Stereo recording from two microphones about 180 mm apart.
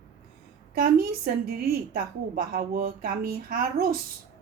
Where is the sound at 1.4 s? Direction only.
55° right (ahead or behind).